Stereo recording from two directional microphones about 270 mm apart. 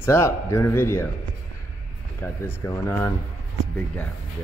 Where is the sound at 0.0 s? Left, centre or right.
Centre.